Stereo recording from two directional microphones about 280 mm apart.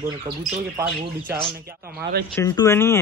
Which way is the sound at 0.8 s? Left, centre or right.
Centre.